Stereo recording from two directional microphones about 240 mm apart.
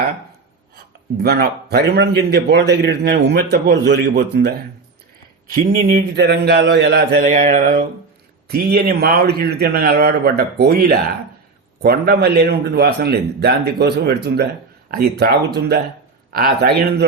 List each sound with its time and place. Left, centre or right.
1.1 s a man's voice: right